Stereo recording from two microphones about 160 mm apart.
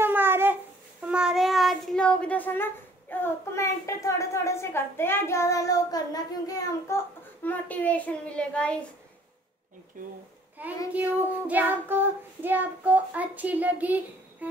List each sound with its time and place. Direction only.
0.0 s a sound: 15° right (ahead or behind)
1.0 s speech: 5° right (ahead or behind); by 7.0 s 20° left (ahead or behind)
7.4 s a child's voice: 10° left (ahead or behind)
10.0 s speech: 55° right (ahead or behind)
10.6 s child singing: 10° right (ahead or behind)